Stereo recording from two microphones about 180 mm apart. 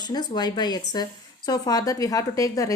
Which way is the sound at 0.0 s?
25° left (ahead or behind).